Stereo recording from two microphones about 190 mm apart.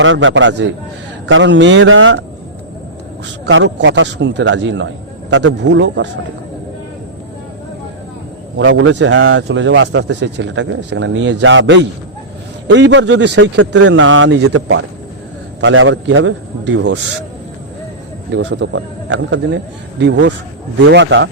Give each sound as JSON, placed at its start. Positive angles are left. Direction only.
{"t": 0.0, "sound": "a man's voice", "side_deg": -90}
{"t": 3.4, "sound": "speech", "side_deg": -70}
{"t": 8.5, "sound": "speech", "side_deg": -80}
{"t": 18.3, "sound": "speech", "side_deg": -80}